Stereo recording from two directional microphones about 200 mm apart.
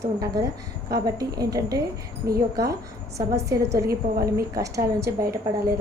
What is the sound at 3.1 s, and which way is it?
A woman's voice, 15° right (ahead or behind).